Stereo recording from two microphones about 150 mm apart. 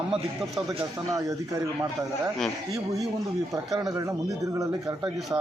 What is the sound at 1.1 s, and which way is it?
Speech, 20° right (ahead or behind).